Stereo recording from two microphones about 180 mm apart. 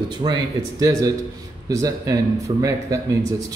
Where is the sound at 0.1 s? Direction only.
25° right (ahead or behind).